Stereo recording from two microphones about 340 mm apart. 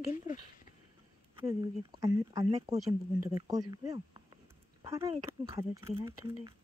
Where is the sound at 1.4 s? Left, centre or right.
Centre.